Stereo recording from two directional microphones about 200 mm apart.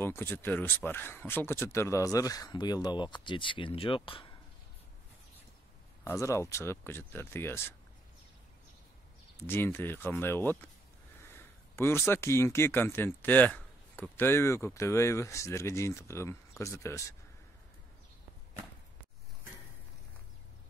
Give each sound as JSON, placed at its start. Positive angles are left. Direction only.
{"t": 0.0, "sound": "speech", "side_deg": 10}
{"t": 6.0, "sound": "speech", "side_deg": 15}
{"t": 9.5, "sound": "speech", "side_deg": 10}